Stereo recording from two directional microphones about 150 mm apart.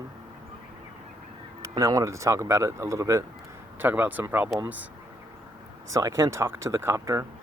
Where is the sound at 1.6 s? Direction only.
20° right (ahead or behind).